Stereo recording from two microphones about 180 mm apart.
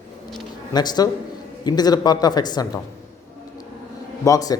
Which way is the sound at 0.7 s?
25° left (ahead or behind).